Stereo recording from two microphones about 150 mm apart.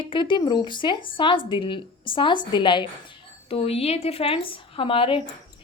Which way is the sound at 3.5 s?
40° left (ahead or behind).